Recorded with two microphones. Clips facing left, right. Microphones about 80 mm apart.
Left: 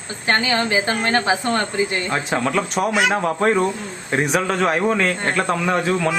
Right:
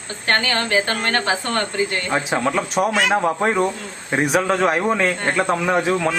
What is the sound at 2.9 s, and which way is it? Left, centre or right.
Speech, centre.